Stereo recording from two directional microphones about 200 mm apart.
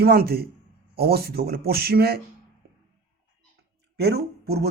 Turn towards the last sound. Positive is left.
turn(degrees=-50)  # may be behind; listen again after turning